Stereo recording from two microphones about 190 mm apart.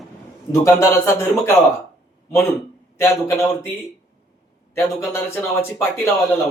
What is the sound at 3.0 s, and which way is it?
Speech, 15° left (ahead or behind).